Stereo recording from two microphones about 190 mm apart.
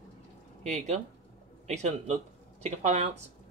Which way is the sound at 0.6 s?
35° right (ahead or behind).